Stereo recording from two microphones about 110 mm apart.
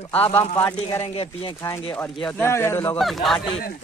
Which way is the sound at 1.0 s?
55° left (ahead or behind).